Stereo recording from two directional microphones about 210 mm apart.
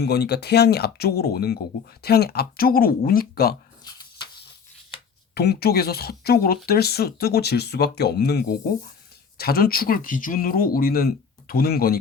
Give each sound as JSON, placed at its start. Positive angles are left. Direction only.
{"t": 0.0, "sound": "speech", "side_deg": 50}
{"t": 3.8, "sound": "a sound", "side_deg": 20}
{"t": 5.3, "sound": "speech", "side_deg": 50}